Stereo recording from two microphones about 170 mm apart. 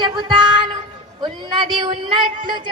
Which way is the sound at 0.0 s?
25° right (ahead or behind).